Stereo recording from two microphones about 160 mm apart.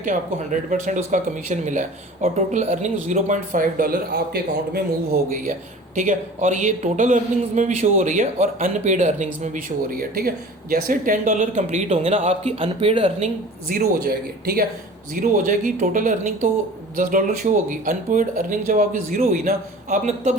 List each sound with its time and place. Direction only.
0.0 s speech: 55° right (ahead or behind); by 13.2 s 35° right (ahead or behind)
13.2 s speech: 60° right (ahead or behind)
15.1 s speech: 55° right (ahead or behind)